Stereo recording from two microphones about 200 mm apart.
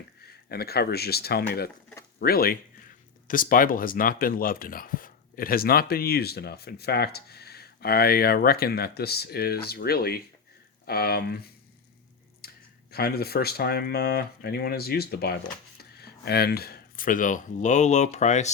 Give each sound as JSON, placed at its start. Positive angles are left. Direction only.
{"t": 0.2, "sound": "speech", "side_deg": 50}
{"t": 12.9, "sound": "speech", "side_deg": 50}